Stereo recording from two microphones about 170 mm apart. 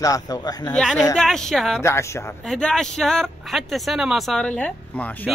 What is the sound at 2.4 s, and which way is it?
Speech, 5° left (ahead or behind).